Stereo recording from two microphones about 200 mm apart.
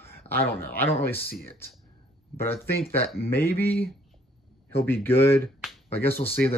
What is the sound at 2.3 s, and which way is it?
Speech, 10° left (ahead or behind).